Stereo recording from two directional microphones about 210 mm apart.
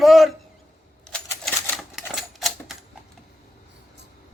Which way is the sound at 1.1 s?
Centre (ahead or behind).